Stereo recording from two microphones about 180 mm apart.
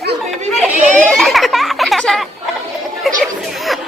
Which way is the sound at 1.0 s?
Centre (ahead or behind).